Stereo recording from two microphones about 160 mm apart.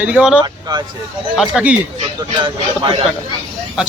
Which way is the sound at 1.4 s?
5° right (ahead or behind).